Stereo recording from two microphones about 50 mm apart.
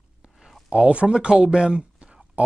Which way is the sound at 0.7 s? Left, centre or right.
Right.